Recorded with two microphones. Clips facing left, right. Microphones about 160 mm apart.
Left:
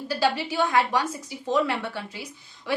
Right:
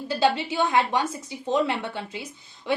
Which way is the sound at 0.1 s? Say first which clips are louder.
Right 2 dB; 25° right (ahead or behind).